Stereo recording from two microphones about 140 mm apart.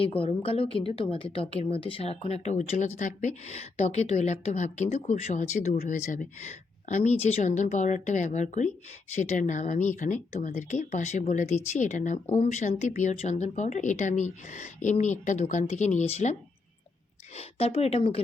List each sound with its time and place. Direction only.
0.0 s a woman's voice: 40° left (ahead or behind)